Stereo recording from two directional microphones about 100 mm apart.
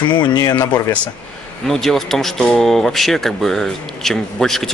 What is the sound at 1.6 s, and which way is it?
Speech, 5° left (ahead or behind).